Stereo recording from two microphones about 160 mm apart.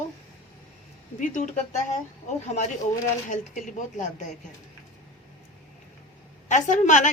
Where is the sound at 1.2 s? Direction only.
50° left (ahead or behind).